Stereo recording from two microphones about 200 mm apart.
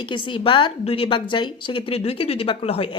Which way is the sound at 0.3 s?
25° left (ahead or behind).